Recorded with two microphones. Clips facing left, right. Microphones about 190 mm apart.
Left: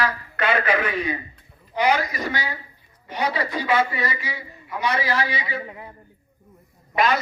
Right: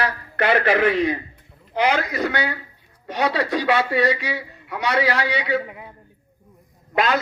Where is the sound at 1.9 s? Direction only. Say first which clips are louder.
Right 1 dB; 65° right (ahead or behind).